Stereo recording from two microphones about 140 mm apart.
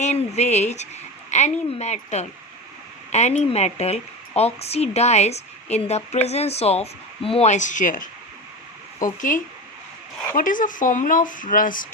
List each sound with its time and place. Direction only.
0.0 s a woman's voice: 55° left (ahead or behind)
10.3 s speech: 70° left (ahead or behind)